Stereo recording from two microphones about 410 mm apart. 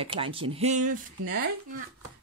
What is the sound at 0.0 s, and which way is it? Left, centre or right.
Speech, centre.